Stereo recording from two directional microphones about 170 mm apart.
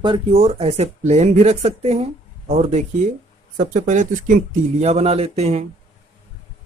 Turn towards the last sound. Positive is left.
turn(degrees=-40)  # may be behind; listen again after turning